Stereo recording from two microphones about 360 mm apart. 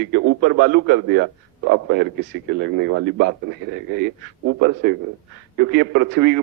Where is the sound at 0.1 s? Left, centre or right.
Right.